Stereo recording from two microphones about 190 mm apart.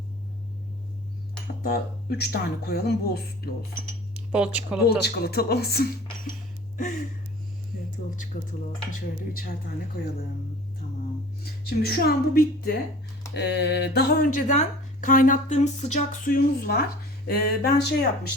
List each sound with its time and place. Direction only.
1.6 s speech: 55° left (ahead or behind)
4.1 s speech: 5° right (ahead or behind)
4.9 s speech: 55° left (ahead or behind)
8.3 s speech: 45° left (ahead or behind)
11.6 s speech: 55° left (ahead or behind)
13.3 s speech: 60° left (ahead or behind)